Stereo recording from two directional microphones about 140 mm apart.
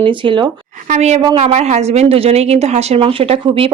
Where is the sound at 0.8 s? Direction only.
55° right (ahead or behind).